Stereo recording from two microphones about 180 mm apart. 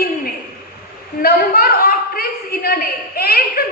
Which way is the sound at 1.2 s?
55° left (ahead or behind).